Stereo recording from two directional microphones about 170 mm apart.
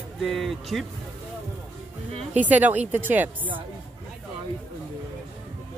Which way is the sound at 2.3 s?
10° right (ahead or behind).